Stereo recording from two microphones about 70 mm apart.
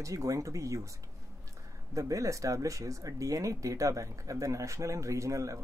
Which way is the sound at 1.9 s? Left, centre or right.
Right.